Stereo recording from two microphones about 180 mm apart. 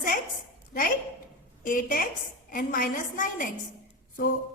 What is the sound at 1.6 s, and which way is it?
A woman's voice, 50° left (ahead or behind).